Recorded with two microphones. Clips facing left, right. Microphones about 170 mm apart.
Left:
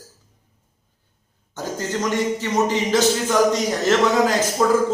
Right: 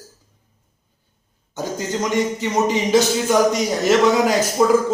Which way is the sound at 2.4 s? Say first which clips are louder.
Right 1 dB; 15° right (ahead or behind).